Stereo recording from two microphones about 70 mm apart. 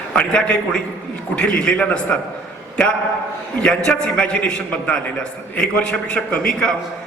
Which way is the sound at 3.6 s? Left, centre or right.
Centre.